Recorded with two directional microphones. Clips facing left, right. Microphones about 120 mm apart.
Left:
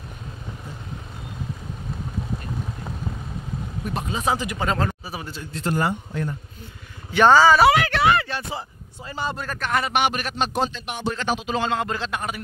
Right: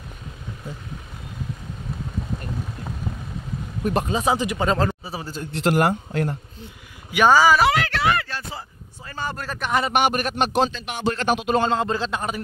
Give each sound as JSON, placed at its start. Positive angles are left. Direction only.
{"t": 4.2, "sound": "speech", "side_deg": -20}
{"t": 5.5, "sound": "a man's voice", "side_deg": -75}
{"t": 7.1, "sound": "speech", "side_deg": -10}
{"t": 7.6, "sound": "speech", "side_deg": 10}
{"t": 9.4, "sound": "speech", "side_deg": -15}
{"t": 9.9, "sound": "a man's voice", "side_deg": -45}
{"t": 10.3, "sound": "speech", "side_deg": -70}
{"t": 11.6, "sound": "speech", "side_deg": -30}